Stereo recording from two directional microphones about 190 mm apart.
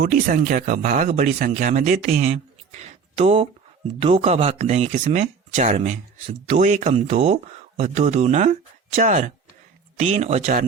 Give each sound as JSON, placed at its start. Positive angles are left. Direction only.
{"t": 0.0, "sound": "speech", "side_deg": -50}
{"t": 3.2, "sound": "speech", "side_deg": -30}